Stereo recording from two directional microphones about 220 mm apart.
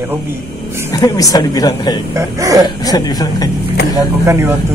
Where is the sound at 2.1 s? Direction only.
15° right (ahead or behind).